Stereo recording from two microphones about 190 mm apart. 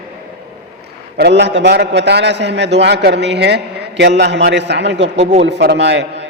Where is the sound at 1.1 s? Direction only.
60° right (ahead or behind).